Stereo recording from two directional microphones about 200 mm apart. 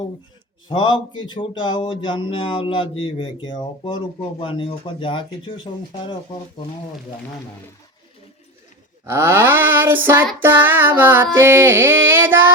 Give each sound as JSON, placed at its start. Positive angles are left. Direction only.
{"t": 0.7, "sound": "speech", "side_deg": 25}
{"t": 9.0, "sound": "music", "side_deg": -15}